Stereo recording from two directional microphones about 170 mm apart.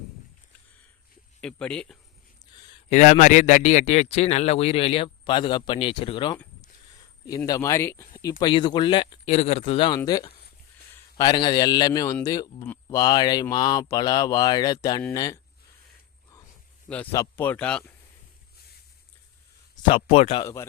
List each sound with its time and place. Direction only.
1.4 s speech: 5° left (ahead or behind)
2.9 s speech: 45° left (ahead or behind); by 8.0 s 15° left (ahead or behind)
8.4 s speech: 25° left (ahead or behind)
11.2 s speech: 25° left (ahead or behind)
16.9 s speech: 10° left (ahead or behind)
19.9 s speech: 35° left (ahead or behind)
20.4 s speech: 15° left (ahead or behind)